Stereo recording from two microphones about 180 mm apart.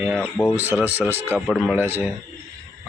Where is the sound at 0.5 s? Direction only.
10° right (ahead or behind).